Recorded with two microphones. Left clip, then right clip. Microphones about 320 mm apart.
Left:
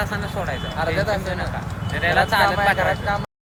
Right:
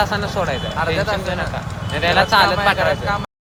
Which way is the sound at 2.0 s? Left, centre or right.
Centre.